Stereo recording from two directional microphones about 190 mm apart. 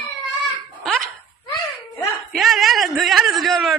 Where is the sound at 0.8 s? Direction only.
Centre (ahead or behind).